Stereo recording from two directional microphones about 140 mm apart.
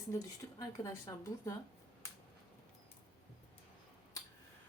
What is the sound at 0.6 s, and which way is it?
Speech, 25° left (ahead or behind).